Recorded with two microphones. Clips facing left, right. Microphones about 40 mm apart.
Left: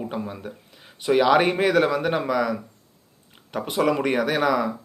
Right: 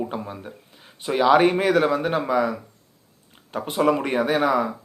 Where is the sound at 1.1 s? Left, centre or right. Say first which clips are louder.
Right 1 dB; left.